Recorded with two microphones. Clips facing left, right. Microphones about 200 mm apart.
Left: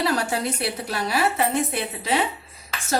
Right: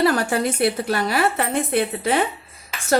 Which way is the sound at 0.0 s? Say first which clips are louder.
Right 5 dB; 55° right (ahead or behind).